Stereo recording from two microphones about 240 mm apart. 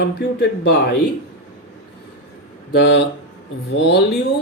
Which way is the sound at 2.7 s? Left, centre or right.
Left.